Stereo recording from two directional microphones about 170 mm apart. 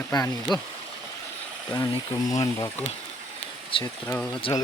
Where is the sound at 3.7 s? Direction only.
30° left (ahead or behind).